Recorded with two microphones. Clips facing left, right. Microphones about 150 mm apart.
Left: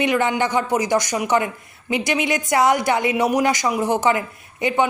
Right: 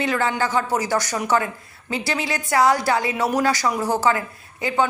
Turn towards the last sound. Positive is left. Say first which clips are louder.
# left 2 dB
turn(degrees=20)  # may be behind; listen again after turning